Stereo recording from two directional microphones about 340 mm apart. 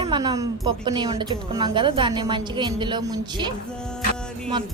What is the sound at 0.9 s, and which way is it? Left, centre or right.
A woman's voice, centre.